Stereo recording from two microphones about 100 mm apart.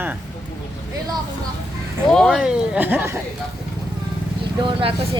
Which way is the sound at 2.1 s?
5° left (ahead or behind).